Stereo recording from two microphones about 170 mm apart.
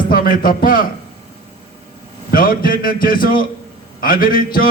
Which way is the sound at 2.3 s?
55° left (ahead or behind).